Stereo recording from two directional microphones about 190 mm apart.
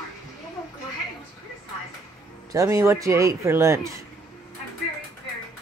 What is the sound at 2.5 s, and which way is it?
Speech, 15° right (ahead or behind).